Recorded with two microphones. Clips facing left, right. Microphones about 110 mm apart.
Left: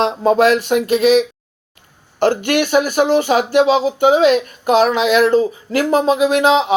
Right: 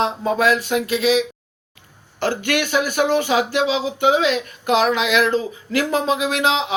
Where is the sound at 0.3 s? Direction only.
70° left (ahead or behind).